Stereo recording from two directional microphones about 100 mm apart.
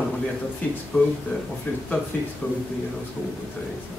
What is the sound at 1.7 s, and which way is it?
Speech, 20° left (ahead or behind).